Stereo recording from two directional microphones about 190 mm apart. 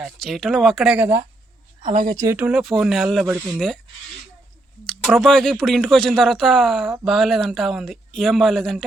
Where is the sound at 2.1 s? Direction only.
15° right (ahead or behind); by 3.7 s centre (ahead or behind).